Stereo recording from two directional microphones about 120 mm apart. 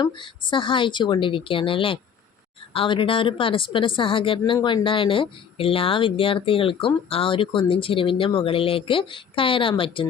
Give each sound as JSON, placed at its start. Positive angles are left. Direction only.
{"t": 0.0, "sound": "a woman's voice", "side_deg": 45}